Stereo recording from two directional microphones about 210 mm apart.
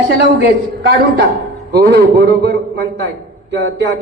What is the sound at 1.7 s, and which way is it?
A man's voice, 50° right (ahead or behind).